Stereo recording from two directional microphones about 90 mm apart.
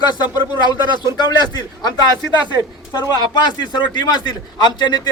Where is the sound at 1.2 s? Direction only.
50° left (ahead or behind).